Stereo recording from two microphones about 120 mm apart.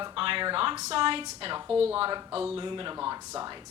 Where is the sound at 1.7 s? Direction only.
10° right (ahead or behind).